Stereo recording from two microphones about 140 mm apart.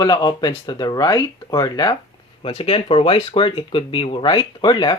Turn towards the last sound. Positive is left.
turn(degrees=35)  # may be behind; listen again after turning